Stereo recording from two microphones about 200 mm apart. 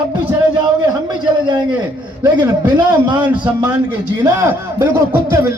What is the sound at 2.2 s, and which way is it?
Speech, 20° right (ahead or behind).